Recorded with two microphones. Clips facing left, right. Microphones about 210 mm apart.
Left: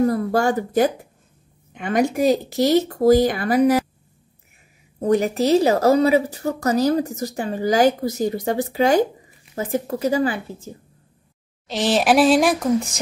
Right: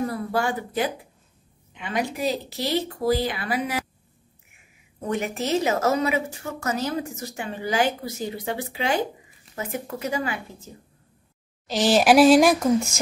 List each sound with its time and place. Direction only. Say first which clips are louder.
0.0 s speech: left 7 dB; 45° left (ahead or behind)
5.0 s a woman's voice: left 9 dB; 35° left (ahead or behind)
11.6 s speech: even; centre (ahead or behind)